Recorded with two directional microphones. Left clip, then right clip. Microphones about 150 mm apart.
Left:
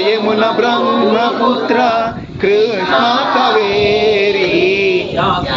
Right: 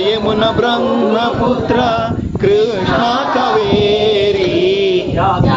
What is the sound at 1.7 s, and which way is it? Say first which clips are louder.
Male singing: left 1 dB; 15° right (ahead or behind).